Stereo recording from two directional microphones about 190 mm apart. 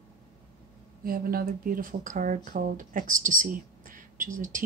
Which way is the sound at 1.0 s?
50° right (ahead or behind).